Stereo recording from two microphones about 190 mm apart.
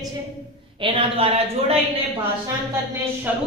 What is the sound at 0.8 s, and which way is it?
A woman's voice, 30° right (ahead or behind).